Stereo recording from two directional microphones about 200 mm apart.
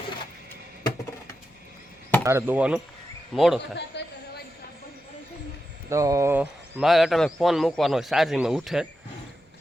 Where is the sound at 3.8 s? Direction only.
55° left (ahead or behind).